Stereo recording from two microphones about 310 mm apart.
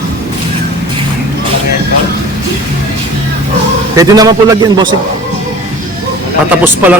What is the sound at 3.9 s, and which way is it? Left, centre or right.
Speech, centre.